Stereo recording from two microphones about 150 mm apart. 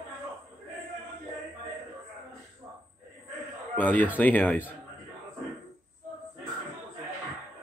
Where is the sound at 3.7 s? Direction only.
10° left (ahead or behind).